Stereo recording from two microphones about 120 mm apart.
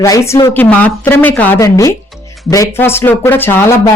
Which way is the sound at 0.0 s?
25° left (ahead or behind).